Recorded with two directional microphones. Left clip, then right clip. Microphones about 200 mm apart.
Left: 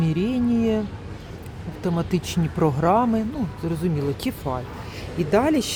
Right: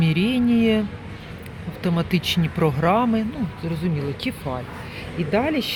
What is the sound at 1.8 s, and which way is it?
Speech, 5° left (ahead or behind).